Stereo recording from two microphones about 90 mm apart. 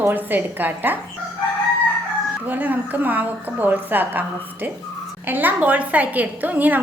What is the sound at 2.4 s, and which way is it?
A woman's voice, 20° right (ahead or behind).